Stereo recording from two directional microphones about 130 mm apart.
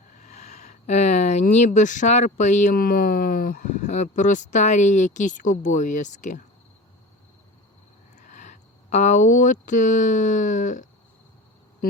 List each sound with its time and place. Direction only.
0.2 s speech: 70° left (ahead or behind)
8.3 s speech: 65° left (ahead or behind)